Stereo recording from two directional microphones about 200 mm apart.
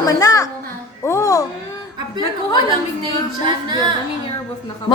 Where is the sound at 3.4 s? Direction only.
25° right (ahead or behind).